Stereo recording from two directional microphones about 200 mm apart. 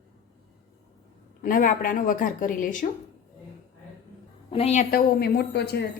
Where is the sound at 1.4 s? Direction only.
45° left (ahead or behind).